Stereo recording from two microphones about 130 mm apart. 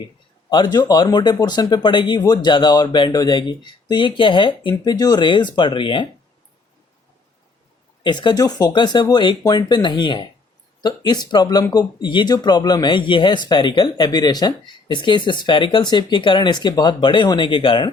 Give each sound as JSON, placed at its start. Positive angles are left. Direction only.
{"t": 0.5, "sound": "speech", "side_deg": 35}
{"t": 8.0, "sound": "speech", "side_deg": 35}